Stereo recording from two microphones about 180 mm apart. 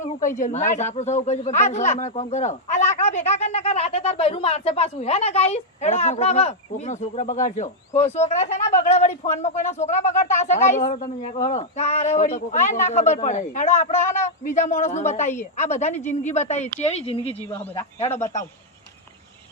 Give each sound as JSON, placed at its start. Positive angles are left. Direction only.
{"t": 0.0, "sound": "a man's voice", "side_deg": 45}